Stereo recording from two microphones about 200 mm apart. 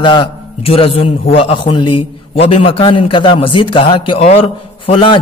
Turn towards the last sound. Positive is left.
turn(degrees=25)  # may be behind; listen again after turning